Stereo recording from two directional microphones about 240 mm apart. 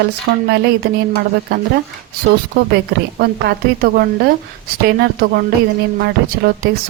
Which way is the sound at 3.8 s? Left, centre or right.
Right.